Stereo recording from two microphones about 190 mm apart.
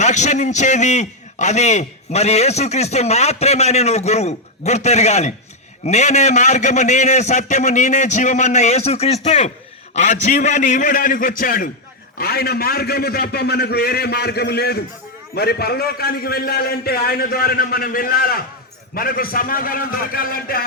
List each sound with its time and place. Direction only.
0.0 s a man's voice: 40° left (ahead or behind)